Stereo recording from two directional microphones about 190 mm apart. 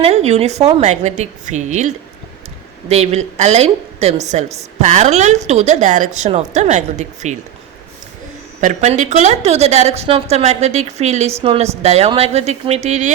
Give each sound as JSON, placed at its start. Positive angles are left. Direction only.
{"t": 0.0, "sound": "a woman's voice", "side_deg": -35}
{"t": 2.9, "sound": "a woman's voice", "side_deg": -35}
{"t": 8.6, "sound": "a woman's voice", "side_deg": -40}